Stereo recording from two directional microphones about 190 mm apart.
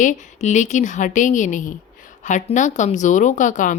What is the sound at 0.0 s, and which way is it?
A woman's voice, 40° left (ahead or behind).